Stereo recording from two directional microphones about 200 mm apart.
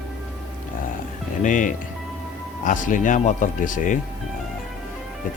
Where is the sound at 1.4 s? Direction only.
40° left (ahead or behind).